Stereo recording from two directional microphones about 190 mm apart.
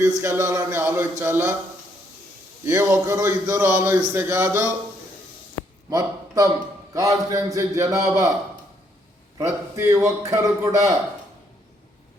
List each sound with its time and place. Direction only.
0.2 s a man's voice: 15° right (ahead or behind)
2.6 s a man's voice: 15° right (ahead or behind)
5.9 s a man's voice: 20° right (ahead or behind)
9.4 s a man's voice: 15° right (ahead or behind)